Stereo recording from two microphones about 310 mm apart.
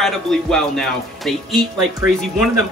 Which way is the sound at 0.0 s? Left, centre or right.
Centre.